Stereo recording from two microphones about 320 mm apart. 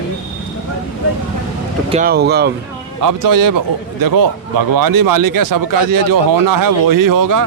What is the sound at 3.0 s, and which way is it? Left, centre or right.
Speech, right.